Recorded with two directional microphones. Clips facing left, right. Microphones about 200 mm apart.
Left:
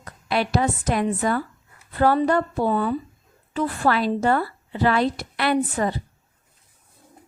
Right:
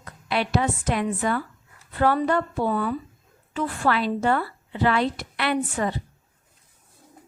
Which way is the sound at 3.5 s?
35° left (ahead or behind).